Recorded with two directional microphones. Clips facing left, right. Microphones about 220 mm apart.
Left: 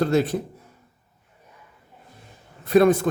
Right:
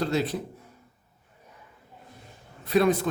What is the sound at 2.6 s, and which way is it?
Speech, 50° left (ahead or behind).